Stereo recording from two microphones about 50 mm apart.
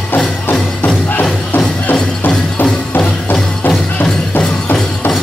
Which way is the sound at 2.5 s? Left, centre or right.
Left.